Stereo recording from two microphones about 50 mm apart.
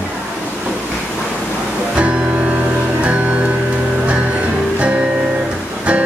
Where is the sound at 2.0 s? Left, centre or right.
Right.